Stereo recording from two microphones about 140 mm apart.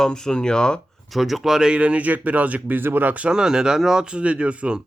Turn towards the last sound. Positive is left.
turn(degrees=-10)  # may be behind; listen again after turning